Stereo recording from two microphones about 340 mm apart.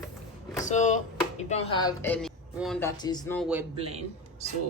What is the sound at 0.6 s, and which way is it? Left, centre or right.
A woman's voice, left.